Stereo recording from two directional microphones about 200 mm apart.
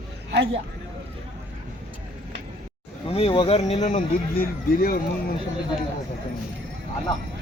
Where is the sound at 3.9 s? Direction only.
45° left (ahead or behind).